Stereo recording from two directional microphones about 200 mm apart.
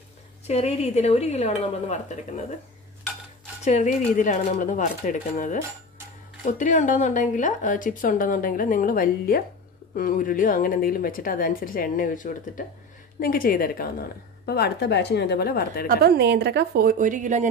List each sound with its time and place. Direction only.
0.5 s speech: 30° left (ahead or behind)
3.6 s a woman's voice: 40° left (ahead or behind)
16.0 s a woman's voice: 55° right (ahead or behind); by 17.5 s 40° right (ahead or behind)